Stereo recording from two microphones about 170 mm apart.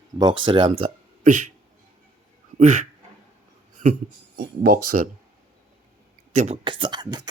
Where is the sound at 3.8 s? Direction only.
55° right (ahead or behind).